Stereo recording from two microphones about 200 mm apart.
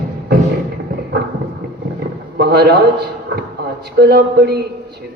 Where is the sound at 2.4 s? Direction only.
55° right (ahead or behind).